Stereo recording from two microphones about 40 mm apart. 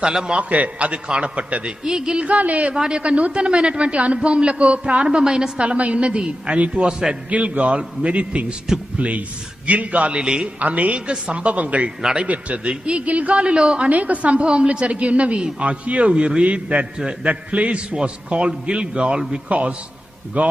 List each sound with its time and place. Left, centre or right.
0.0 s a man's voice: right
0.4 s a woman's voice: right
1.9 s a man's voice: centre
2.2 s a woman's voice: right
2.7 s a man's voice: centre
3.0 s a man's voice: right
6.8 s a man's voice: centre
7.2 s a woman's voice: right
10.1 s a man's voice: right
10.6 s a woman's voice: right
12.0 s a man's voice: centre
12.3 s a woman's voice: right
13.7 s a woman's voice: right
20.4 s a woman's voice: right